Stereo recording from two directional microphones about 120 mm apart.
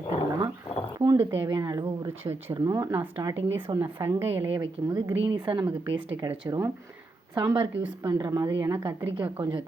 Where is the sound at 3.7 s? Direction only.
40° right (ahead or behind).